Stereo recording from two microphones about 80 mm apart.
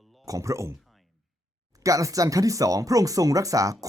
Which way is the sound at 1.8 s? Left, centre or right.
Right.